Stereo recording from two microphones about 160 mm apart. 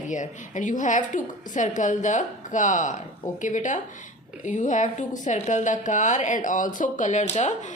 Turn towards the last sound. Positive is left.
turn(degrees=50)  # may be behind; listen again after turning